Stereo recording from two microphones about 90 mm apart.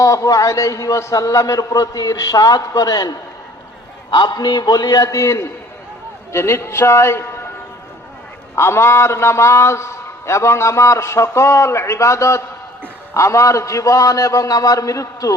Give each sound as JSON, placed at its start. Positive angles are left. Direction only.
{"t": 0.0, "sound": "a man's voice", "side_deg": 40}
{"t": 8.5, "sound": "a man's voice", "side_deg": 30}